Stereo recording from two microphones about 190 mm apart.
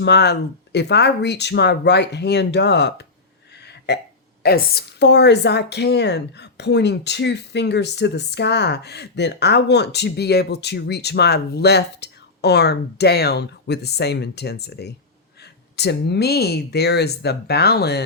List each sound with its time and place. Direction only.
0.0 s a woman's voice: 65° left (ahead or behind)
3.7 s a sound: 60° left (ahead or behind)
4.4 s a woman's voice: 55° left (ahead or behind)